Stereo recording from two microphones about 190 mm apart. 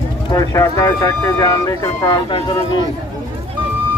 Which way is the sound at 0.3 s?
20° left (ahead or behind).